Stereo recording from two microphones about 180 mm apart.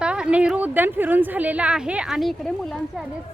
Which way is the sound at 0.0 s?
5° right (ahead or behind).